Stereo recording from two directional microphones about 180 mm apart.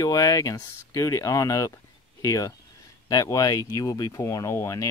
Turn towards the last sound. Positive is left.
turn(degrees=15)  # may be behind; listen again after turning